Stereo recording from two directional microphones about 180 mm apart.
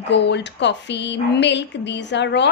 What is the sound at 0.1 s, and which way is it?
A woman's voice, 75° left (ahead or behind).